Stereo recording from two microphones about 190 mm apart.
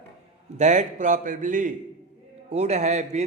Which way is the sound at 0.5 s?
40° right (ahead or behind).